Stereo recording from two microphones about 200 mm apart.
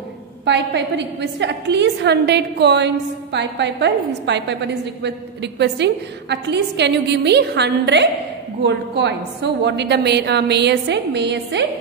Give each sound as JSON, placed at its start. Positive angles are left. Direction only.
{"t": 0.5, "sound": "a woman's voice", "side_deg": -60}